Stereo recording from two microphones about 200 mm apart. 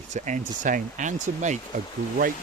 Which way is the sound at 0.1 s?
40° right (ahead or behind).